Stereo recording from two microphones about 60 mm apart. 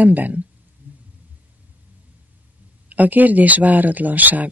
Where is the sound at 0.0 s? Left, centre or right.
Right.